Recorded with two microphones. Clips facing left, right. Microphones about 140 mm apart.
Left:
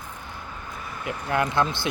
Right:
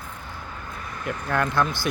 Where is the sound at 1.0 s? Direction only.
15° left (ahead or behind).